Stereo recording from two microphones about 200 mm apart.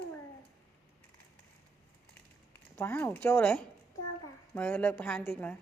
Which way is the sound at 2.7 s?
10° left (ahead or behind).